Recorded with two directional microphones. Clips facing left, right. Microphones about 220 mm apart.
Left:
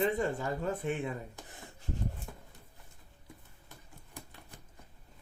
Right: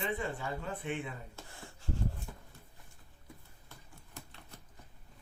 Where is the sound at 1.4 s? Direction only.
20° left (ahead or behind).